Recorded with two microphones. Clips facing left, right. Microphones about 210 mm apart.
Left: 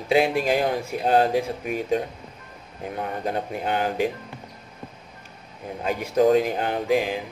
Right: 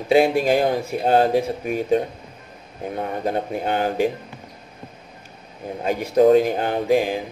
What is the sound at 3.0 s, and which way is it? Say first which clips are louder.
Speech: right 3 dB; 35° right (ahead or behind).